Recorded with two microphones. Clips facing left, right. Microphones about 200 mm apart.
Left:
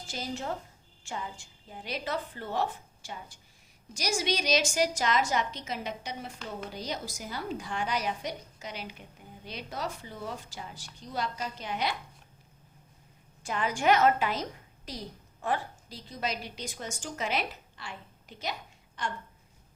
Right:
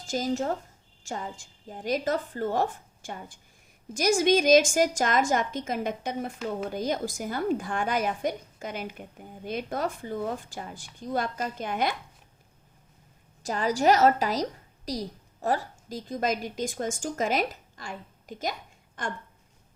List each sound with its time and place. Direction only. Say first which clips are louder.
0.1 s a woman's voice: right 8 dB; 45° right (ahead or behind)
13.4 s a woman's voice: right 5 dB; 40° right (ahead or behind)